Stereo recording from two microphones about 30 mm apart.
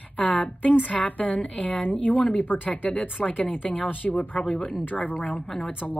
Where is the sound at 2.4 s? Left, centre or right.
Left.